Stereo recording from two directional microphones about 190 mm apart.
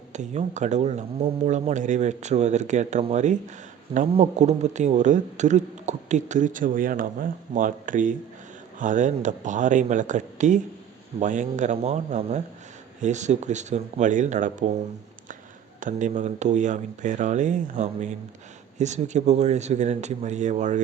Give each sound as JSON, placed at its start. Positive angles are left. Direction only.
{"t": 0.1, "sound": "speech", "side_deg": -40}
{"t": 15.8, "sound": "speech", "side_deg": -40}